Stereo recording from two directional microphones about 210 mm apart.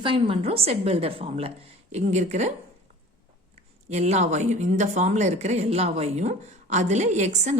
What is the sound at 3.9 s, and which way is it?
Speech, 30° right (ahead or behind).